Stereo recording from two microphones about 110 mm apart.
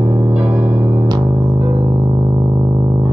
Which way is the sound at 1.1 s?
30° right (ahead or behind).